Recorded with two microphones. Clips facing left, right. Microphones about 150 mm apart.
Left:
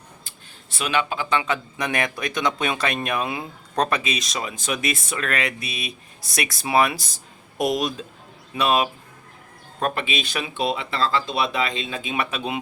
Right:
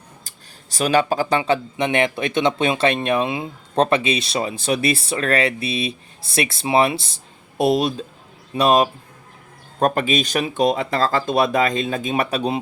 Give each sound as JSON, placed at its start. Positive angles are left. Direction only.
{"t": 0.3, "sound": "speech", "side_deg": -40}